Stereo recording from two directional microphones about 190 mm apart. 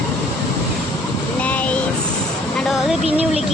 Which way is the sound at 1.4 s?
5° left (ahead or behind).